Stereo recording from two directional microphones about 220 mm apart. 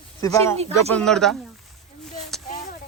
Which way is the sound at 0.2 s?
15° left (ahead or behind).